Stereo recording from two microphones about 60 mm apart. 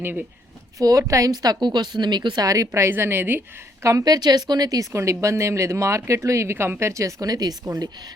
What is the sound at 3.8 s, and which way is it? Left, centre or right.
Speech, right.